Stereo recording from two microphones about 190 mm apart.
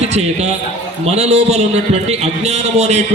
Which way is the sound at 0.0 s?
35° right (ahead or behind).